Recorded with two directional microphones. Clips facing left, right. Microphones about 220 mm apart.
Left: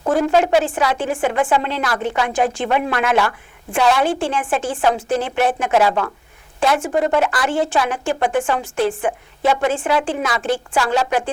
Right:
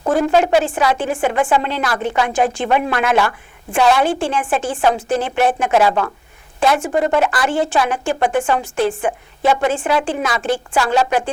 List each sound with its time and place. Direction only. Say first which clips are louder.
0.0 s a woman's voice: right 1 dB; 20° right (ahead or behind)